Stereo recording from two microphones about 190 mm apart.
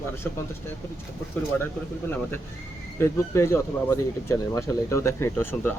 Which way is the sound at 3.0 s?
15° left (ahead or behind).